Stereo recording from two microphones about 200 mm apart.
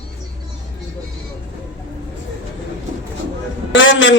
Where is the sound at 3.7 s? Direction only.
70° left (ahead or behind).